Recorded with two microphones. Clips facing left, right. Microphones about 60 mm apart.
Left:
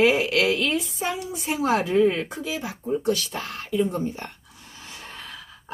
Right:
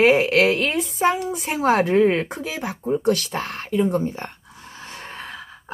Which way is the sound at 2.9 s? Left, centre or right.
Right.